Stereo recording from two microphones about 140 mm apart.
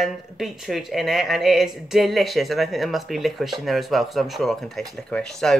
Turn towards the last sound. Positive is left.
turn(degrees=5)  # may be behind; listen again after turning